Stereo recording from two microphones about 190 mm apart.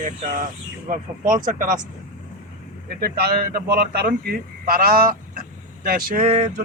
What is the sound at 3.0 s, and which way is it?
A man's voice, 55° right (ahead or behind).